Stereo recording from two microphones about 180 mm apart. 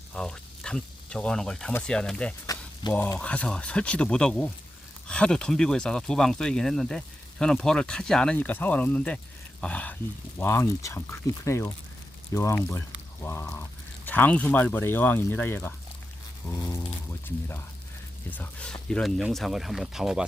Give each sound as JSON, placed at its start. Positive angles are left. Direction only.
{"t": 0.1, "sound": "speech", "side_deg": 5}
{"t": 18.3, "sound": "speech", "side_deg": 5}